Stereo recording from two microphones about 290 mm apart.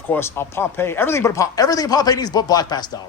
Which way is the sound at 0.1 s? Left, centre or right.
Centre.